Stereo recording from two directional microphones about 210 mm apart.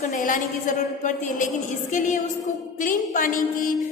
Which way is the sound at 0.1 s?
40° left (ahead or behind).